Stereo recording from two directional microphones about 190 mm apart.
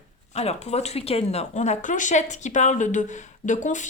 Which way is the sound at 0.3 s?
35° left (ahead or behind).